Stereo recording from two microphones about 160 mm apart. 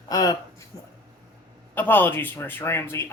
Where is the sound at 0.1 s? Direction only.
25° left (ahead or behind).